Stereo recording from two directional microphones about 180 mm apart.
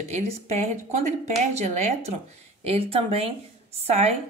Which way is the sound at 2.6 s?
35° right (ahead or behind).